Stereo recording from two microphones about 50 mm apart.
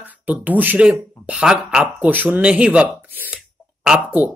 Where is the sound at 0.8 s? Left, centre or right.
Right.